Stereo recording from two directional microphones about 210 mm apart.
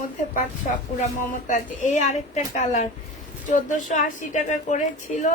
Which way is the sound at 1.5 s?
35° left (ahead or behind).